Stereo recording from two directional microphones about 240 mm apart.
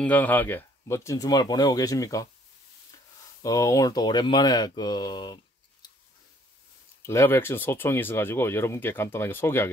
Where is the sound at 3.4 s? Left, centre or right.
Centre.